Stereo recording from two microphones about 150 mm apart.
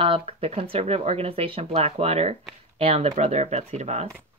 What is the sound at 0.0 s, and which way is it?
Speech, 40° right (ahead or behind).